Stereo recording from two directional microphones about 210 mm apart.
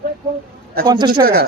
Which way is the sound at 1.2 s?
50° right (ahead or behind).